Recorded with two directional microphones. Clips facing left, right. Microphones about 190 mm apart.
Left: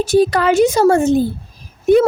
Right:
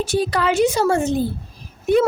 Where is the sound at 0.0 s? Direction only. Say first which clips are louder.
Left 6 dB; 45° left (ahead or behind).